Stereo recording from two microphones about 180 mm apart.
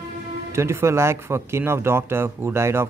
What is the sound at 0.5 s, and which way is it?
Speech, 15° right (ahead or behind).